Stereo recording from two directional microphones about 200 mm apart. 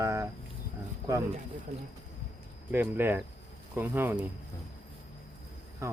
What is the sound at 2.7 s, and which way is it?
Speech, 10° right (ahead or behind).